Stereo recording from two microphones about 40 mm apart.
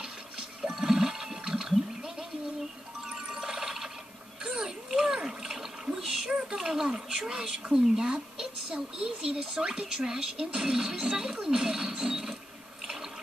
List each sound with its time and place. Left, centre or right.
0.0 s toilet flush: centre
1.7 s gargling: centre
3.1 s a sound: centre
4.4 s splash: centre
5.9 s a sound: centre
7.7 s a woman's voice: centre
11.9 s mechanisms: centre